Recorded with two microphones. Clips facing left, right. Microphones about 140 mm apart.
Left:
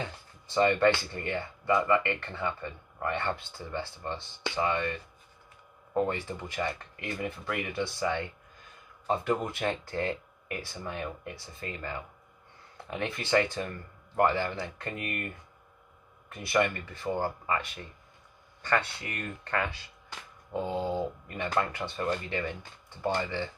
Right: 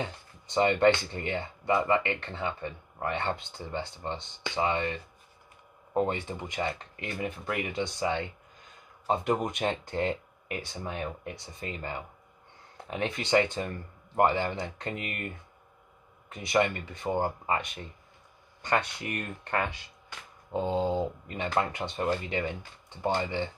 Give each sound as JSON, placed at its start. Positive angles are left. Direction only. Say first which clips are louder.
{"t": 0.0, "sound": "speech", "louder": "right 2 dB", "side_deg": -20}
{"t": 16.4, "sound": "speech", "louder": "right 1 dB", "side_deg": -20}